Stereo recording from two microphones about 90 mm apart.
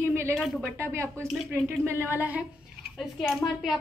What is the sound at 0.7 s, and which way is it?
Speech, 30° right (ahead or behind).